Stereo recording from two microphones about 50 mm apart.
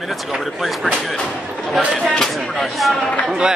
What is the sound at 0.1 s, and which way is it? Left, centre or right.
Speech, centre.